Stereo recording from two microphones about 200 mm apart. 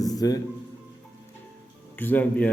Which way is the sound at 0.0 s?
20° left (ahead or behind).